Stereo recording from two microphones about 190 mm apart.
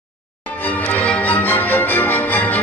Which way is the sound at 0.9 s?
5° left (ahead or behind).